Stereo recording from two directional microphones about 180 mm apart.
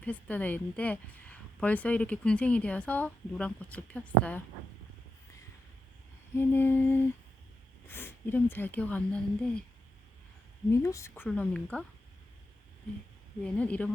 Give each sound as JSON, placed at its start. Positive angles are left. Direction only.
{"t": 0.0, "sound": "a woman's voice", "side_deg": 10}
{"t": 6.3, "sound": "a woman's voice", "side_deg": 10}
{"t": 10.7, "sound": "a woman's voice", "side_deg": 15}
{"t": 13.4, "sound": "a woman's voice", "side_deg": 5}